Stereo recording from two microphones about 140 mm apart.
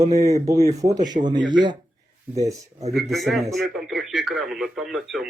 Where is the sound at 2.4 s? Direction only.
25° right (ahead or behind).